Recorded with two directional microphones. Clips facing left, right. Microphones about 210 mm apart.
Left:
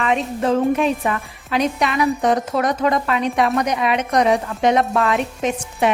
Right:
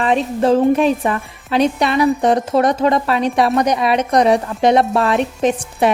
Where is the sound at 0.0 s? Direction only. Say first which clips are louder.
Right 4 dB; 30° right (ahead or behind).